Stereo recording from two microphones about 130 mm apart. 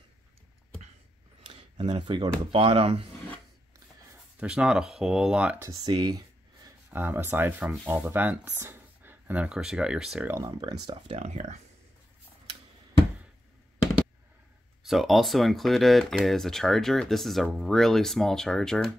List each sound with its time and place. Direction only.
1.5 s speech: 40° right (ahead or behind)
4.4 s speech: 5° right (ahead or behind)
5.9 s a sound: 30° right (ahead or behind)
6.9 s speech: 15° right (ahead or behind)
10.2 s speech: 20° right (ahead or behind)
11.1 s speech: 60° right (ahead or behind)
14.8 s speech: centre (ahead or behind)